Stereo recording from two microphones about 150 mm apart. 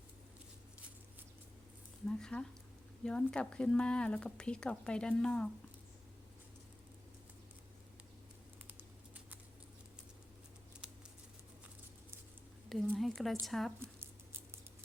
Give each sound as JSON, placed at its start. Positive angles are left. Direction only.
{"t": 2.0, "sound": "speech", "side_deg": 5}
{"t": 12.6, "sound": "speech", "side_deg": 0}
{"t": 13.7, "sound": "patter", "side_deg": -15}